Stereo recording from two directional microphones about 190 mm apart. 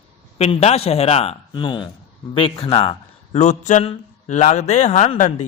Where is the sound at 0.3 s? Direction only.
35° left (ahead or behind).